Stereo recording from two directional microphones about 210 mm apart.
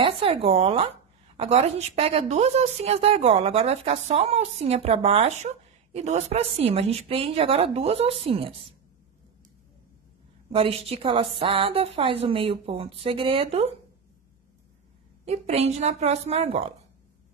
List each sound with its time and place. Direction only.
0.0 s a woman's voice: 25° right (ahead or behind)
10.5 s a woman's voice: 25° right (ahead or behind)
15.2 s a woman's voice: 30° right (ahead or behind)